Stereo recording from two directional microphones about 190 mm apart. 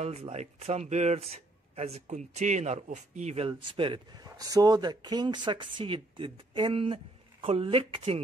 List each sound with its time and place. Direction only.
0.0 s a man's voice: 35° right (ahead or behind)